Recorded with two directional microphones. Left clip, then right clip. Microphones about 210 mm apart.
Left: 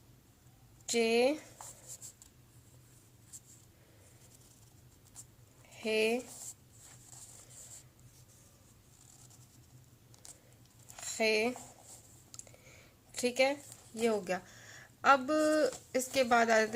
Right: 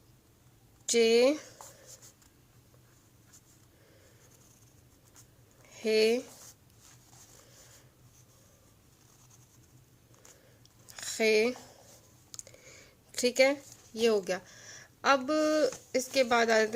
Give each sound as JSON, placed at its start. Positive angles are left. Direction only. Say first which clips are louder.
{"t": 0.9, "sound": "speech", "louder": "right 5 dB", "side_deg": -40}
{"t": 5.8, "sound": "speech", "louder": "right 5 dB", "side_deg": -40}
{"t": 10.8, "sound": "a sound", "louder": "right 4 dB", "side_deg": -40}
{"t": 14.0, "sound": "speech", "louder": "right 5 dB", "side_deg": -25}